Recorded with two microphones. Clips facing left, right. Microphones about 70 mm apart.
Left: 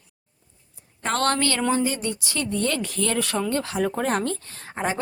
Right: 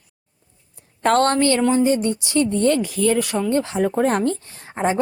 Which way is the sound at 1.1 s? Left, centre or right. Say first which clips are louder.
Right 5 dB; right.